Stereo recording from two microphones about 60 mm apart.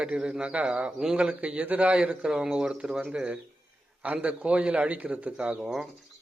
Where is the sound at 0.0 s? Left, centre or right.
Centre.